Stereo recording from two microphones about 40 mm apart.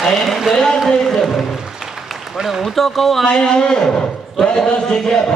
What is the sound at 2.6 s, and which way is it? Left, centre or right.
Speech, centre.